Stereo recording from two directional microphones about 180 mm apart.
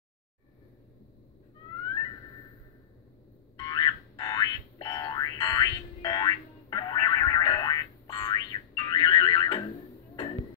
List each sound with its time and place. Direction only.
3.5 s boing: 20° left (ahead or behind)